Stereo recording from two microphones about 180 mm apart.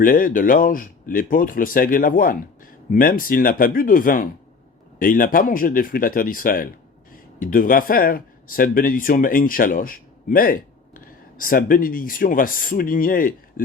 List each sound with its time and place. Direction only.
0.0 s speech: 50° left (ahead or behind)